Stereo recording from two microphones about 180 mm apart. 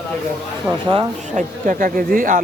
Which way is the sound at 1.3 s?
45° right (ahead or behind).